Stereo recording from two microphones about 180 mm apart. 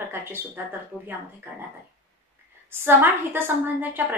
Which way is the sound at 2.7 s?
10° right (ahead or behind).